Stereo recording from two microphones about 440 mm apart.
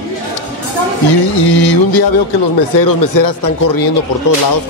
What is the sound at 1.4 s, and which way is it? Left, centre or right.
Music, left.